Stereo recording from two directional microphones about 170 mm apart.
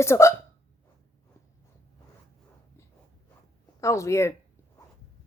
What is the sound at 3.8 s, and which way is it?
Speech, 15° left (ahead or behind).